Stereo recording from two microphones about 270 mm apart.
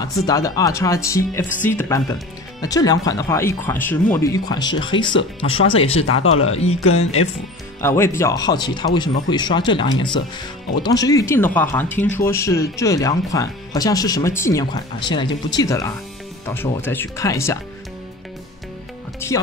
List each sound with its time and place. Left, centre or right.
0.0 s speech: centre
6.0 s speech: left
7.8 s speech: centre
19.1 s music: centre